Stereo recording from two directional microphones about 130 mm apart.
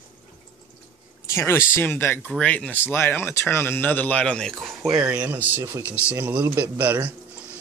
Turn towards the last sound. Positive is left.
turn(degrees=-15)  # may be behind; listen again after turning